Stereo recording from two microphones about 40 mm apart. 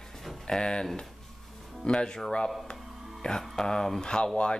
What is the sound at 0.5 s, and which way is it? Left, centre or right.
Speech, left.